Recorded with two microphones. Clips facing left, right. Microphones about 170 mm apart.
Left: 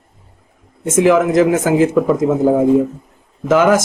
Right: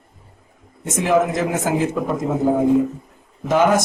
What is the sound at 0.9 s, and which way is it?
Speech, 90° left.